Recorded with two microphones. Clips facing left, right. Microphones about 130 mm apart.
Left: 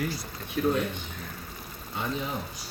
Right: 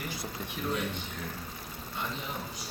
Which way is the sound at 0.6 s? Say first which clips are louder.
Left 10 dB; 70° left (ahead or behind).